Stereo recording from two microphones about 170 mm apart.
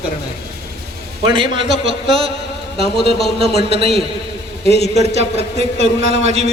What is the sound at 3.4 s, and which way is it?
Speech, 75° left (ahead or behind).